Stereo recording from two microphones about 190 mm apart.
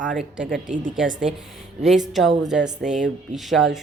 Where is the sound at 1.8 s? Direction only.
Centre (ahead or behind).